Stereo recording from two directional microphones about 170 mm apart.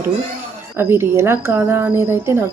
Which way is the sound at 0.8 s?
15° right (ahead or behind).